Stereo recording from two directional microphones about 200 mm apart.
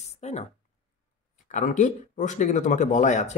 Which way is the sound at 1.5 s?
35° left (ahead or behind).